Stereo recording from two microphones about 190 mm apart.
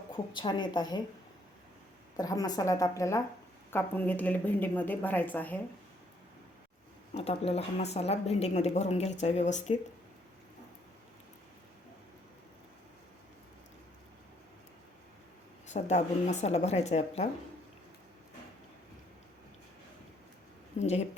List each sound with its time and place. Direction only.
0.3 s a woman's voice: 25° left (ahead or behind)
2.1 s speech: 20° left (ahead or behind)
7.1 s speech: 35° left (ahead or behind)
15.6 s speech: 35° left (ahead or behind)
20.7 s speech: 35° left (ahead or behind)